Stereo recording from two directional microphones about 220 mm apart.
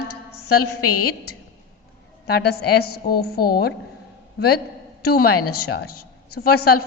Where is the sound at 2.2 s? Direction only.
45° left (ahead or behind).